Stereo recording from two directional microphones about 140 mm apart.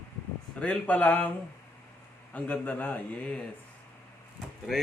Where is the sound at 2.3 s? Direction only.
10° left (ahead or behind).